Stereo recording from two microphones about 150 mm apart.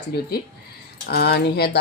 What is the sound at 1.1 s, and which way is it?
Speech, 90° left.